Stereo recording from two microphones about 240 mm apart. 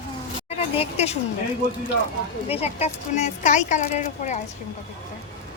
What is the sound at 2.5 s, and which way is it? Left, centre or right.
Speech, left.